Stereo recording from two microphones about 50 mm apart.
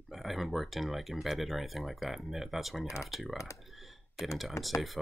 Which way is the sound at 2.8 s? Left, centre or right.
Left.